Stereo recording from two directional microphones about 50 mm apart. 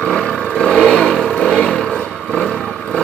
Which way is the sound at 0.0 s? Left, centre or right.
Centre.